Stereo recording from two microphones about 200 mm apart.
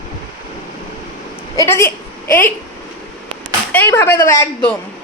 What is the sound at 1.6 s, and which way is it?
Speech, 15° left (ahead or behind).